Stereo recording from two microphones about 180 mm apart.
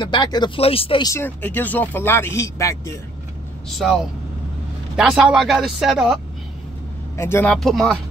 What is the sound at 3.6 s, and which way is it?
Speech, centre (ahead or behind).